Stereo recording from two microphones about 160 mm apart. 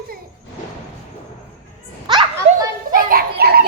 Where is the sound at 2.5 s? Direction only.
60° right (ahead or behind); by 3.6 s 80° right.